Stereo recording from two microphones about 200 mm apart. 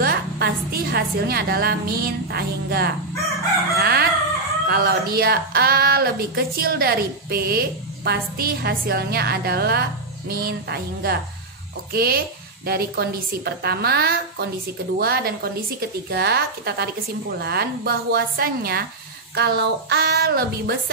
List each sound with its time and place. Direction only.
0.0 s speech: 50° right (ahead or behind)
3.7 s chicken: 50° right (ahead or behind)
4.6 s speech: 50° right (ahead or behind)